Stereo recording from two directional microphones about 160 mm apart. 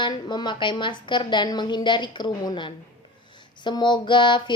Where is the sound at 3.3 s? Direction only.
30° left (ahead or behind).